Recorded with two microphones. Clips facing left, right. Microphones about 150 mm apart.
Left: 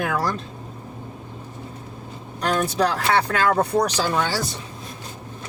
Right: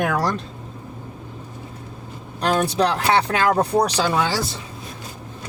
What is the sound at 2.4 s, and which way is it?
Speech, 30° right (ahead or behind).